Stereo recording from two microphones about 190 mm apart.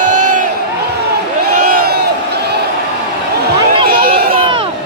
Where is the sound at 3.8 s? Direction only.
50° right (ahead or behind).